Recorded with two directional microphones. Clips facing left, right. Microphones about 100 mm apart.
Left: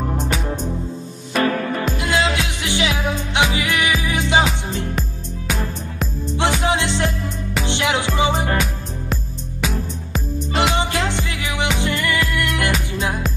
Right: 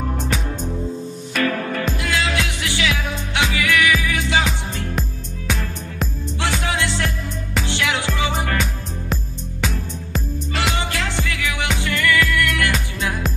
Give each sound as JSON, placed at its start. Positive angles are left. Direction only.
{"t": 1.3, "sound": "music", "side_deg": 25}
{"t": 6.3, "sound": "music", "side_deg": 20}
{"t": 9.1, "sound": "music", "side_deg": 5}
{"t": 10.5, "sound": "music", "side_deg": 20}